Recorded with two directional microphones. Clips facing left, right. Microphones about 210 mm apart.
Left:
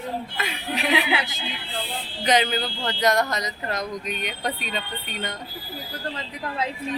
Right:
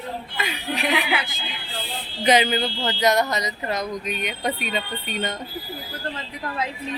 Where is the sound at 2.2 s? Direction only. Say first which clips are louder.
Right 3 dB; 10° right (ahead or behind).